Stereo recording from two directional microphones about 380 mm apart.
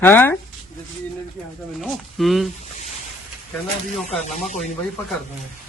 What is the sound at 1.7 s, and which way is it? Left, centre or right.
Speech, centre.